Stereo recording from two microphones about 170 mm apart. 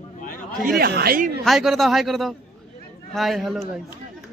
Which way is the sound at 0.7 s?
65° right (ahead or behind).